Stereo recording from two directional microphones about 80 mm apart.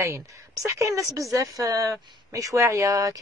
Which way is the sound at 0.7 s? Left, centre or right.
Right.